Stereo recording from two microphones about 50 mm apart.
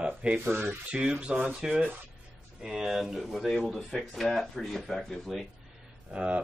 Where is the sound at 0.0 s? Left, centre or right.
Right.